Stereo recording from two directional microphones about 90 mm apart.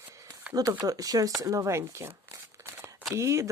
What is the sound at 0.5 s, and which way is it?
Speech, 45° right (ahead or behind).